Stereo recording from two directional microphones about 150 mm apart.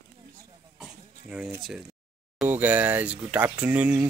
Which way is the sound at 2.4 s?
10° right (ahead or behind).